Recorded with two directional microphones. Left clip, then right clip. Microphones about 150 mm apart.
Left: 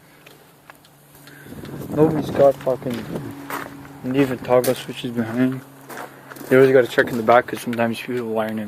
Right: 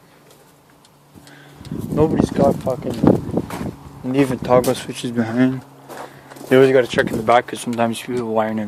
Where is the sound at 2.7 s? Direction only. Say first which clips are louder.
Left 1 dB; 5° right (ahead or behind).